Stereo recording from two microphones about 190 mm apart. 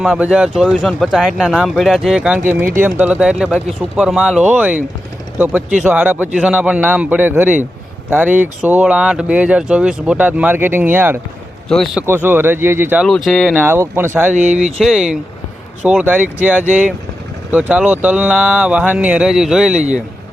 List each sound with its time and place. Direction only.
0.0 s speech: 5° right (ahead or behind)
11.7 s speech: centre (ahead or behind)
12.0 s speech: 10° right (ahead or behind)
13.1 s speech: centre (ahead or behind)
13.6 s speech: 10° right (ahead or behind)
14.3 s speech: 40° right (ahead or behind)
14.8 s speech: centre (ahead or behind)